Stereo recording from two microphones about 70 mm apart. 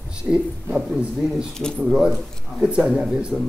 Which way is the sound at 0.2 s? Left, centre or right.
Centre.